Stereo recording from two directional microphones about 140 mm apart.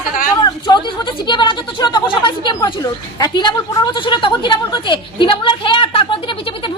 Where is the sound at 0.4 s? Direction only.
30° left (ahead or behind).